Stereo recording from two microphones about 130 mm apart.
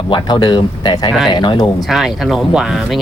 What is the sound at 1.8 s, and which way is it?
Speech, centre (ahead or behind).